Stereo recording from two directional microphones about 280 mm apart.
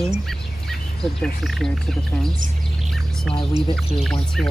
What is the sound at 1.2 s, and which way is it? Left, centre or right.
Speech, centre.